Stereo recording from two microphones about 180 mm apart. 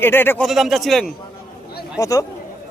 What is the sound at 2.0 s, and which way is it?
Speech, 20° left (ahead or behind).